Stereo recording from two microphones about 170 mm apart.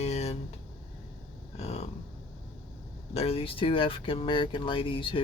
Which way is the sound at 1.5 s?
40° left (ahead or behind).